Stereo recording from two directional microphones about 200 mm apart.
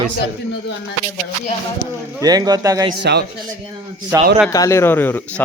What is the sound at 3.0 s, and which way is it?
Speech, 55° right (ahead or behind).